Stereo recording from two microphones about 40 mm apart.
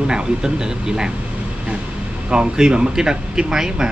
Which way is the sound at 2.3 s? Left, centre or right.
Right.